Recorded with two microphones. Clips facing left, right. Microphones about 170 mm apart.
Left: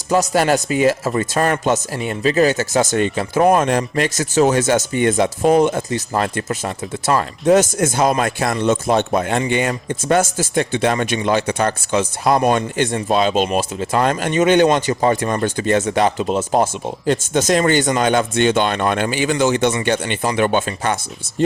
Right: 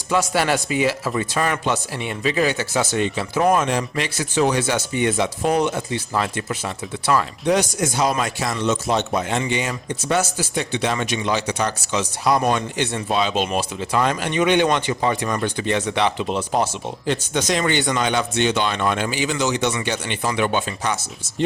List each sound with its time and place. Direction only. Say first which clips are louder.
0.1 s speech: left 4 dB; 45° left (ahead or behind)